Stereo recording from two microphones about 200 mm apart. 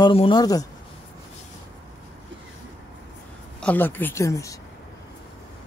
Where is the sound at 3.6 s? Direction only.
10° left (ahead or behind).